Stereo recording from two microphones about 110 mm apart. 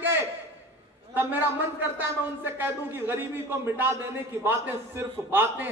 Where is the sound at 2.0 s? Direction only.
20° right (ahead or behind).